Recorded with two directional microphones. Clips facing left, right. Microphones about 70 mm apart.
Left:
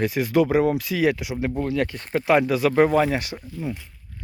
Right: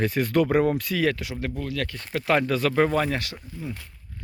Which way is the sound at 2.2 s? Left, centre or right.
Centre.